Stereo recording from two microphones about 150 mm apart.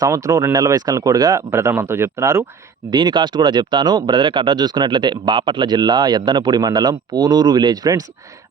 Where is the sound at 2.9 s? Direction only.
30° right (ahead or behind).